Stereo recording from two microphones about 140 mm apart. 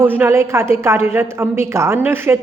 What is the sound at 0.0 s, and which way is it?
A woman's voice, 15° right (ahead or behind).